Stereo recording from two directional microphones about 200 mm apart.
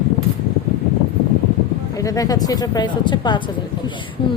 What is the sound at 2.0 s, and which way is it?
Speech, 15° left (ahead or behind).